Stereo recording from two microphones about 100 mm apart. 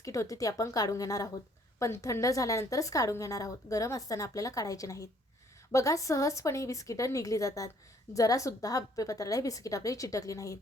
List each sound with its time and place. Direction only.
0.0 s a woman's voice: 30° left (ahead or behind)